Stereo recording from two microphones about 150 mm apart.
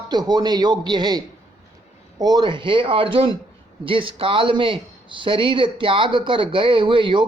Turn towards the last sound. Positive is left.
turn(degrees=-35)  # may be behind; listen again after turning